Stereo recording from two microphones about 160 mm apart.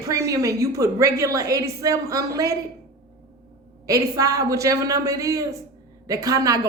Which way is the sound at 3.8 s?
20° right (ahead or behind).